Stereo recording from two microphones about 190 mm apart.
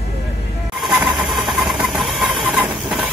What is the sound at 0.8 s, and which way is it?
Engine, centre (ahead or behind).